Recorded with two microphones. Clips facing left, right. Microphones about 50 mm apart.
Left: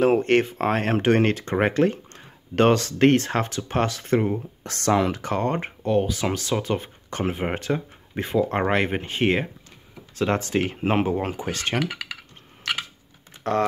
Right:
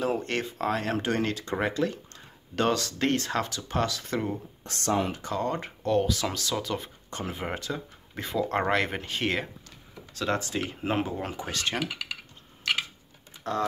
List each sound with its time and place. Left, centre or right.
0.0 s speech: left
4.6 s speech: left
5.2 s speech: left
5.8 s speech: centre; by 7.8 s left
8.2 s speech: left
10.1 s speech: left
13.4 s typing: left